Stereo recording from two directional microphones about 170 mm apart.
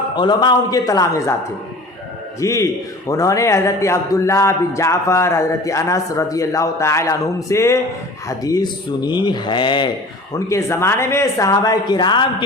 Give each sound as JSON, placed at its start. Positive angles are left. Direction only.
{"t": 0.2, "sound": "speech", "side_deg": 25}
{"t": 2.4, "sound": "a man's voice", "side_deg": 20}
{"t": 10.3, "sound": "a man's voice", "side_deg": 15}